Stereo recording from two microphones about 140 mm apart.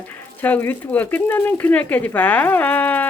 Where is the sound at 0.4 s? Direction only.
15° left (ahead or behind).